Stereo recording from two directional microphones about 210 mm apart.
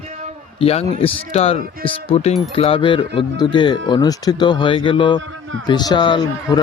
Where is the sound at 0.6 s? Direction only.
30° left (ahead or behind).